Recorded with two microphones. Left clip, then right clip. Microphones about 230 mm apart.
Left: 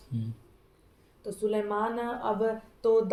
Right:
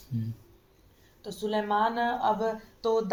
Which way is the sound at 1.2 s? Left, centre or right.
Right.